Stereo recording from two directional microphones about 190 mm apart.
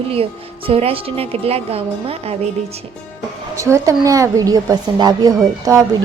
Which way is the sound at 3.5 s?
15° right (ahead or behind).